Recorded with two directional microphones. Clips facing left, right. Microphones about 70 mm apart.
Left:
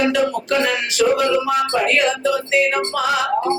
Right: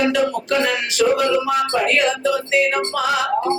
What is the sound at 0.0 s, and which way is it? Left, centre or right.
Music, left.